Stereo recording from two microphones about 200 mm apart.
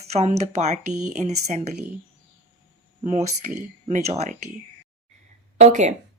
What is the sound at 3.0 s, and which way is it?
A woman's voice, 35° right (ahead or behind).